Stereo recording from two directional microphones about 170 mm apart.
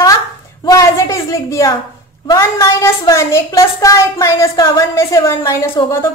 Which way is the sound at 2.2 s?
20° left (ahead or behind).